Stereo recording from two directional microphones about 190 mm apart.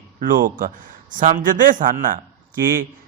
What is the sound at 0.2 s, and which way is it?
A man's voice, 45° right (ahead or behind).